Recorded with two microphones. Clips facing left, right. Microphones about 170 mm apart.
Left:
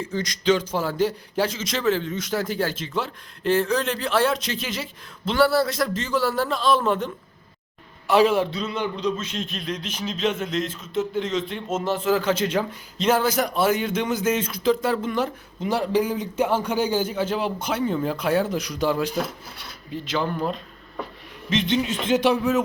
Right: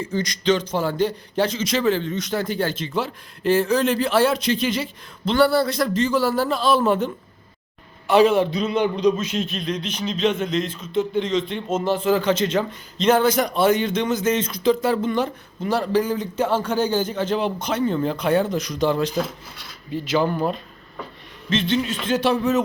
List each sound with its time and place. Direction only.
0.0 s a man's voice: centre (ahead or behind)
8.4 s a man's voice: 15° right (ahead or behind); by 15.3 s centre (ahead or behind)
15.6 s a man's voice: 15° left (ahead or behind)
19.9 s a man's voice: 5° right (ahead or behind)
21.5 s a man's voice: 15° left (ahead or behind)